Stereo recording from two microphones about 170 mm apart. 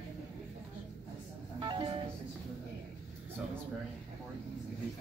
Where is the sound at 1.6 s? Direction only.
30° right (ahead or behind).